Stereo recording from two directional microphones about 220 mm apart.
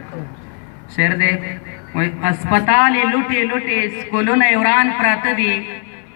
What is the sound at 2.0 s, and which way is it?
A man's voice, 35° right (ahead or behind).